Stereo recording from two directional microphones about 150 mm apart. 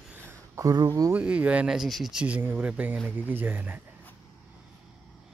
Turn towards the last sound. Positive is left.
turn(degrees=-10)  # may be behind; listen again after turning